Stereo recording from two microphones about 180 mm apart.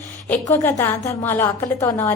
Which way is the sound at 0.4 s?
15° left (ahead or behind).